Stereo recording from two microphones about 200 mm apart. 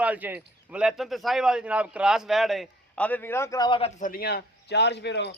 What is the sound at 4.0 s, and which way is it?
A man's voice, 45° left (ahead or behind).